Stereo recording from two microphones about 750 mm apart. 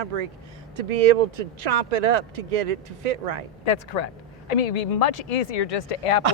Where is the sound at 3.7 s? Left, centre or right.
Left.